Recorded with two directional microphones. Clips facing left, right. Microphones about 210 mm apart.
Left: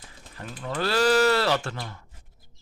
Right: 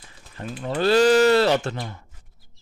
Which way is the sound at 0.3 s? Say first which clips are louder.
Right 5 dB; 25° right (ahead or behind).